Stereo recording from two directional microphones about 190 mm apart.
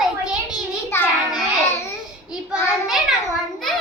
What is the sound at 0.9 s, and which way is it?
Child singing, 15° left (ahead or behind).